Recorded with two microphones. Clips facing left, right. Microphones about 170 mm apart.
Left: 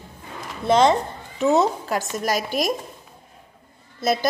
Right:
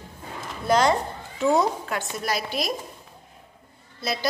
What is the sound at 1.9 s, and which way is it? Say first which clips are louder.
Speech: left 4 dB; 40° left (ahead or behind).